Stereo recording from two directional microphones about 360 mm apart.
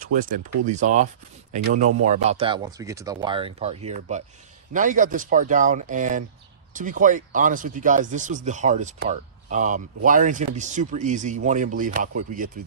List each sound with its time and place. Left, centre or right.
0.0 s speech: right